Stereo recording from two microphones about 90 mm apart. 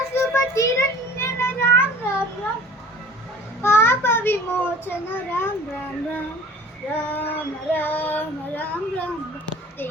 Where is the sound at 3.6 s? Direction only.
25° left (ahead or behind).